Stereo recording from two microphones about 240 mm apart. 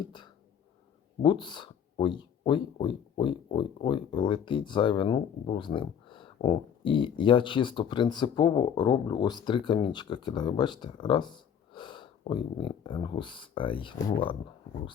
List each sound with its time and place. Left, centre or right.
0.0 s speech: centre